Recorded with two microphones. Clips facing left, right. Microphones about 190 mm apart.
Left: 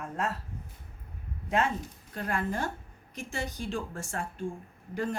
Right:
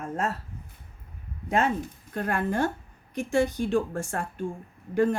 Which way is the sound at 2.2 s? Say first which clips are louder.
Right 6 dB; 60° right (ahead or behind).